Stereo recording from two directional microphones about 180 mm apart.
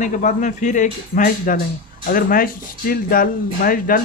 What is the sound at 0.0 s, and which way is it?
A man's voice, 45° left (ahead or behind).